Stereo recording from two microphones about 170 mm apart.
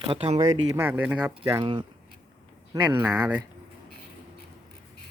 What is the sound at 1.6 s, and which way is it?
Speech, 30° right (ahead or behind).